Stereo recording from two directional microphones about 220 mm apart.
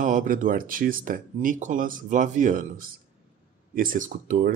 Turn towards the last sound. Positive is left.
turn(degrees=-40)  # may be behind; listen again after turning